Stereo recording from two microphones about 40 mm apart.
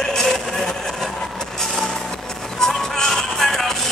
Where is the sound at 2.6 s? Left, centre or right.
Centre.